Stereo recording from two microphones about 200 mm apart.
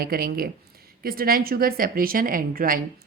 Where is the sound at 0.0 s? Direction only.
50° right (ahead or behind).